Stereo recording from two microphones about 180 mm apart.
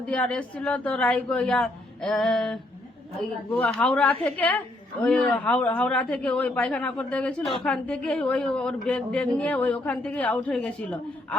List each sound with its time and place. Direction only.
0.0 s a woman's voice: 5° left (ahead or behind)